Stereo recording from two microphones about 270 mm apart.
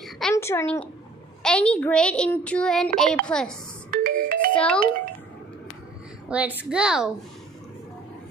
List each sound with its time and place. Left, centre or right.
0.0 s a sound: centre
1.4 s a child's voice: centre
3.9 s music: right
4.6 s a child's voice: centre
6.2 s a child's voice: centre